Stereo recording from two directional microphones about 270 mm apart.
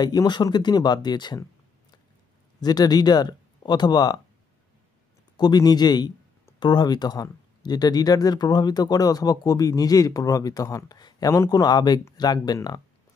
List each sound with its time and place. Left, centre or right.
0.0 s speech: centre
2.6 s speech: centre
5.4 s speech: centre